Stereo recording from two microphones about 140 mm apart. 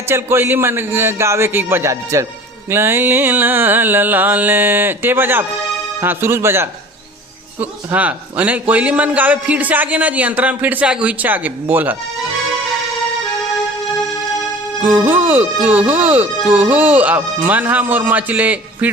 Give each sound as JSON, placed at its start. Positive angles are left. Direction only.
{"t": 0.1, "sound": "a man's voice", "side_deg": -15}
{"t": 14.8, "sound": "a man's voice", "side_deg": -15}